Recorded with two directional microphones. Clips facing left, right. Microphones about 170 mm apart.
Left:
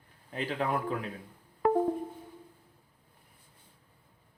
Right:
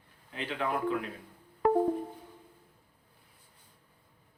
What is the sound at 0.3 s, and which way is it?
Speech, 40° left (ahead or behind).